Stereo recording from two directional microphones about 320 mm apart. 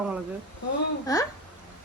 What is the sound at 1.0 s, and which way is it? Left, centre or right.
Speech, centre.